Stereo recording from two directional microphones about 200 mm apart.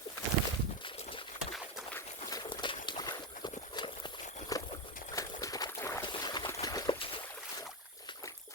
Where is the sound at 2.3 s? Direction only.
25° left (ahead or behind).